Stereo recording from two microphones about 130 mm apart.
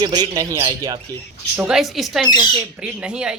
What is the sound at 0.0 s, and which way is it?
Speech, 30° right (ahead or behind).